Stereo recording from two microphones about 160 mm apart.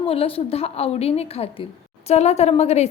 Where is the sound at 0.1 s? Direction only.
40° left (ahead or behind).